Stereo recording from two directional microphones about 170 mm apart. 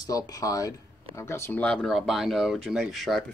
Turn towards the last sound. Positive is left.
turn(degrees=0)  # may be behind; listen again after turning